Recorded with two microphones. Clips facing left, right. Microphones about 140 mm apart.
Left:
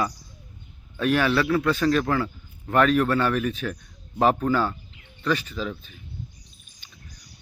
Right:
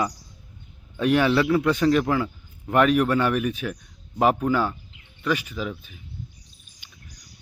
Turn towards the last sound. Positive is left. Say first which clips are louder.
# even
turn(degrees=-10)  # may be behind; listen again after turning